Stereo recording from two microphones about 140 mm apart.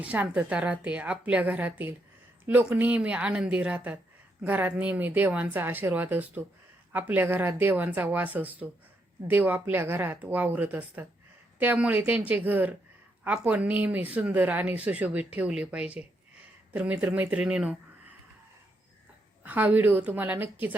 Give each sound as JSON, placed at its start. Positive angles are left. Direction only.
{"t": 0.0, "sound": "speech", "side_deg": -10}
{"t": 19.4, "sound": "speech", "side_deg": -15}